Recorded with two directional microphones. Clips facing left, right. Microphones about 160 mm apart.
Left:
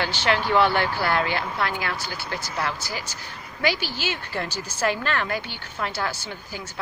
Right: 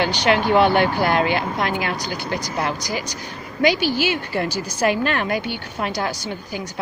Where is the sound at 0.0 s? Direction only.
15° right (ahead or behind).